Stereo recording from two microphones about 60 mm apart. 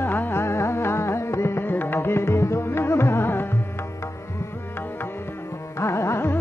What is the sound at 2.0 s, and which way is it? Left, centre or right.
Music, left.